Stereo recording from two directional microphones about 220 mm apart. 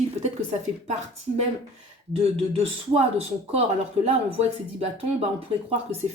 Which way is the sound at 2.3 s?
25° right (ahead or behind).